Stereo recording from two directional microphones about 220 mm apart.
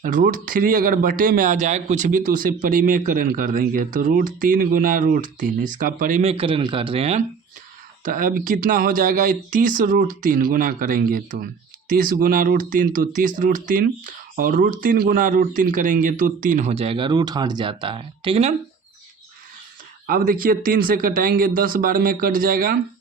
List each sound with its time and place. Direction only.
0.0 s speech: 35° right (ahead or behind)
8.0 s speech: 40° right (ahead or behind)
20.1 s speech: 40° right (ahead or behind)